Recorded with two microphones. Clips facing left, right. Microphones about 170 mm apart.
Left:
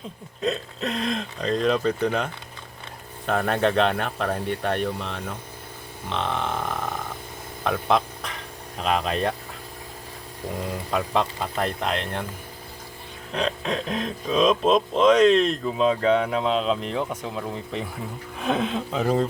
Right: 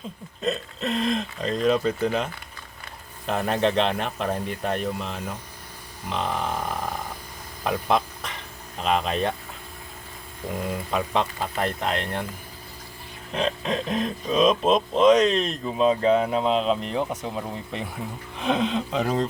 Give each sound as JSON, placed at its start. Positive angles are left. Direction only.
{"t": 0.4, "sound": "speech", "side_deg": 0}
{"t": 7.6, "sound": "a sound", "side_deg": 0}
{"t": 8.8, "sound": "speech", "side_deg": 0}
{"t": 10.9, "sound": "speech", "side_deg": 0}
{"t": 13.3, "sound": "speech", "side_deg": 0}